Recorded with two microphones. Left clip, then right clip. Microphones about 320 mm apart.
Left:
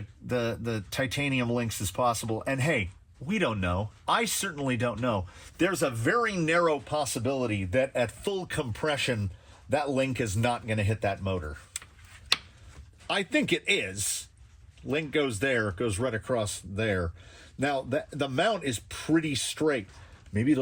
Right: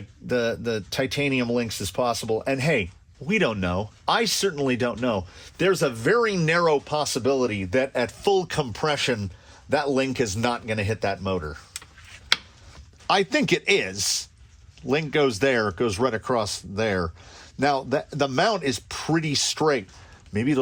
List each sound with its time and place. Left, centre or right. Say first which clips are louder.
0.3 s speech: right 6 dB; right
1.6 s speech: right 5 dB; centre
2.0 s speech: right 3 dB; right
13.1 s speech: right 6 dB; right